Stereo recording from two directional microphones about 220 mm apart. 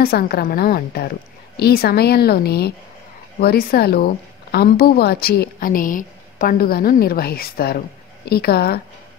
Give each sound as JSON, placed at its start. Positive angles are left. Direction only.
{"t": 0.0, "sound": "a woman's voice", "side_deg": 45}